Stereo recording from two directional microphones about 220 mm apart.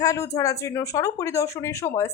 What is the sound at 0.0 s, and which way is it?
Speech, 15° left (ahead or behind).